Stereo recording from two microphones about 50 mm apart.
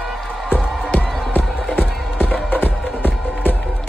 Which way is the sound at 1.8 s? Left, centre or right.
Left.